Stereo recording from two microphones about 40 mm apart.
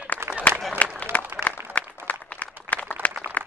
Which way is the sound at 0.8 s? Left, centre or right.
Left.